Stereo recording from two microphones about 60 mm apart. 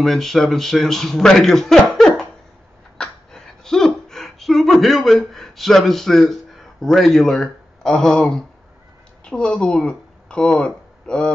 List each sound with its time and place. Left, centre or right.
0.0 s a man's voice: centre
3.0 s a sound: centre
9.2 s speech: centre